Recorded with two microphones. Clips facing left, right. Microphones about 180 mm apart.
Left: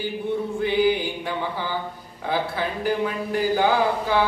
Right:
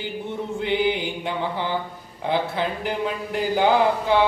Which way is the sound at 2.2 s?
20° right (ahead or behind).